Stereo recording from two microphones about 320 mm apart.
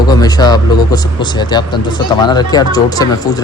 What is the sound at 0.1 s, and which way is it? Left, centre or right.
Speech, centre.